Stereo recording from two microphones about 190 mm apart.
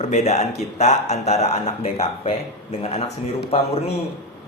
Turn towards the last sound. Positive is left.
turn(degrees=30)  # may be behind; listen again after turning